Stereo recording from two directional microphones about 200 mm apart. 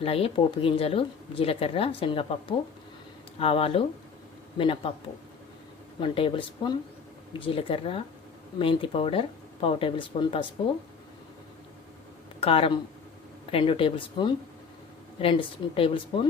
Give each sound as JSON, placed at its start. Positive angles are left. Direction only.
{"t": 0.0, "sound": "speech", "side_deg": 30}
{"t": 6.0, "sound": "speech", "side_deg": 25}
{"t": 12.4, "sound": "speech", "side_deg": 30}